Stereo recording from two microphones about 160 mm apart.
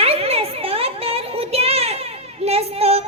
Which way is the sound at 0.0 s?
40° right (ahead or behind).